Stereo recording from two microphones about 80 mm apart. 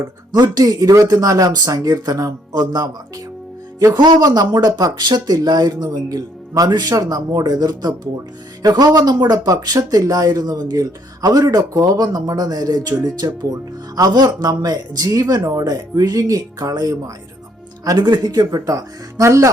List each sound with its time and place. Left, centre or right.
0.3 s speech: right
3.9 s speech: right
17.9 s speech: right